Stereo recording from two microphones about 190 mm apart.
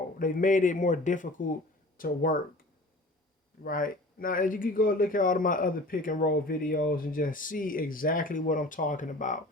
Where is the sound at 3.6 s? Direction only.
45° left (ahead or behind).